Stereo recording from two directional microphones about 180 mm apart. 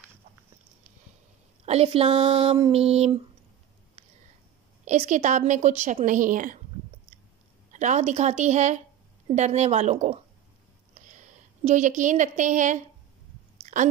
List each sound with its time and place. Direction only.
1.7 s speech: 35° right (ahead or behind)
4.8 s a woman's voice: 45° right (ahead or behind)
7.7 s a woman's voice: 40° right (ahead or behind)
13.7 s chewing: 45° right (ahead or behind)